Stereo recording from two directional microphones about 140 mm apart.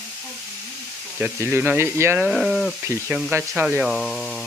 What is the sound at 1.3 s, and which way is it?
Speech, 15° right (ahead or behind).